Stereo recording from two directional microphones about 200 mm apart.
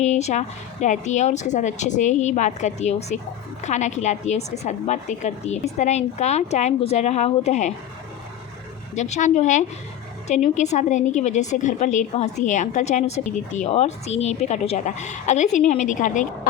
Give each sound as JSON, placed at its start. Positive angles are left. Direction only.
{"t": 0.0, "sound": "a woman's voice", "side_deg": 35}
{"t": 9.0, "sound": "a woman's voice", "side_deg": 35}